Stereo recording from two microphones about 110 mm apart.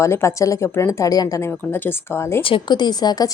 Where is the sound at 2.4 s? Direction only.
45° left (ahead or behind).